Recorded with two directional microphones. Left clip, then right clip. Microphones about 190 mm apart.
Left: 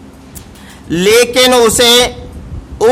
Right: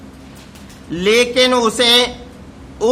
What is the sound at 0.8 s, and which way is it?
A man's voice, 55° left (ahead or behind).